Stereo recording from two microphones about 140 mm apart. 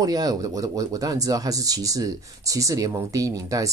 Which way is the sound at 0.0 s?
25° right (ahead or behind).